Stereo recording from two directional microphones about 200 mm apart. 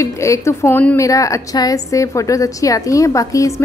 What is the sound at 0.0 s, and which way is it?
A woman's voice, 15° left (ahead or behind).